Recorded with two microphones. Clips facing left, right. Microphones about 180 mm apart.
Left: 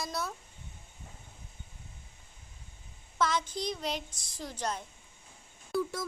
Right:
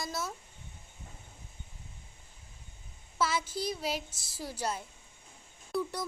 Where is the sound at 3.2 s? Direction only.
5° right (ahead or behind).